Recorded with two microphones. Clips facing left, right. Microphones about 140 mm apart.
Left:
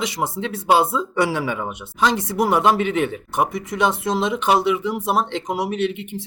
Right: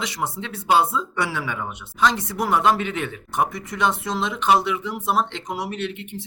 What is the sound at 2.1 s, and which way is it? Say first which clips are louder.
Speech: left 5 dB; 10° left (ahead or behind).